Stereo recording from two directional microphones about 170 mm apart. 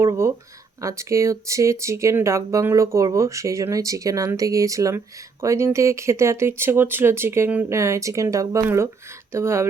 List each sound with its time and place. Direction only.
0.0 s speech: 15° right (ahead or behind)